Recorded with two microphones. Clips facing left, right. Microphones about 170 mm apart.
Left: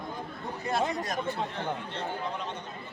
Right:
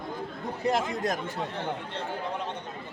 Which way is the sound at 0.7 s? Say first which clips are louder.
Even; 90° right.